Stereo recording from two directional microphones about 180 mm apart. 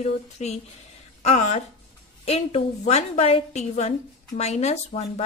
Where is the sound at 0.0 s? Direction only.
35° left (ahead or behind).